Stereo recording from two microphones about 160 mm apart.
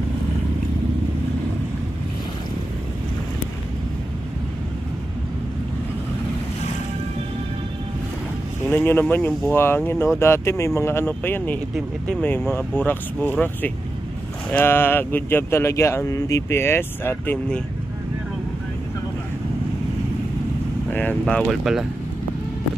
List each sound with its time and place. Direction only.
8.6 s speech: 15° left (ahead or behind)
20.9 s speech: 10° left (ahead or behind)